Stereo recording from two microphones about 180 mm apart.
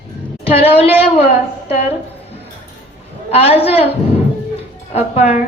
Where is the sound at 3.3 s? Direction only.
30° left (ahead or behind).